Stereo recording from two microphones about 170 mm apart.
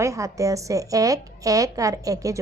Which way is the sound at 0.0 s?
20° right (ahead or behind).